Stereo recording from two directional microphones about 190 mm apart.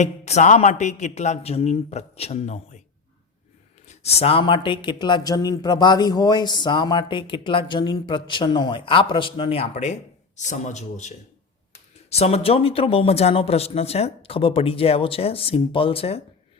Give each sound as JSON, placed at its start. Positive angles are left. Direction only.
{"t": 0.0, "sound": "speech", "side_deg": 35}
{"t": 3.8, "sound": "a man's voice", "side_deg": 35}
{"t": 12.1, "sound": "speech", "side_deg": 35}